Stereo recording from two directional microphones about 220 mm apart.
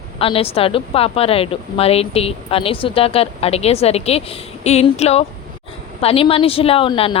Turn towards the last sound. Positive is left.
turn(degrees=25)  # may be behind; listen again after turning